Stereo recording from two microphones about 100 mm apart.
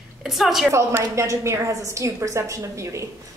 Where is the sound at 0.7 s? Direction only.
30° right (ahead or behind).